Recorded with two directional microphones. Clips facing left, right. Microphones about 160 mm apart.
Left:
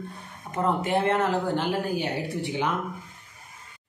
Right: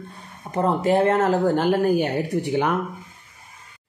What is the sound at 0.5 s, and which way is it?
Speech, 35° right (ahead or behind).